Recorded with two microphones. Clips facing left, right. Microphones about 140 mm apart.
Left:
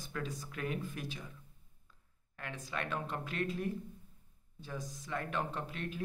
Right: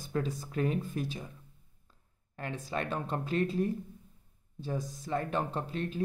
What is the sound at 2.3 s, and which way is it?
Speech, 30° right (ahead or behind).